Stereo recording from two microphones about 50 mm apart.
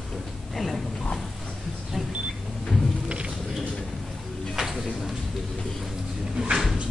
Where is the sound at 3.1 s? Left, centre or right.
Right.